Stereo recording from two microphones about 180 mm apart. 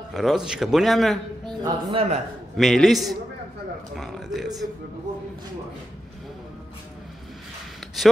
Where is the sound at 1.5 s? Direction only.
25° right (ahead or behind).